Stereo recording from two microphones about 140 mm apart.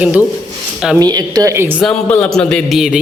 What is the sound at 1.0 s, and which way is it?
Speech, 30° right (ahead or behind).